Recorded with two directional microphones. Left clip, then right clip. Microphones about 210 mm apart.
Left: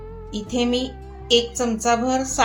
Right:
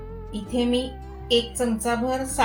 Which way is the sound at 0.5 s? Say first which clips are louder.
Left 2 dB; 25° left (ahead or behind).